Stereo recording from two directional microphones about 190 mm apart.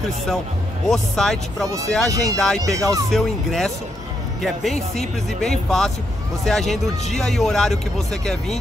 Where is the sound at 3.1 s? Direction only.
Centre (ahead or behind).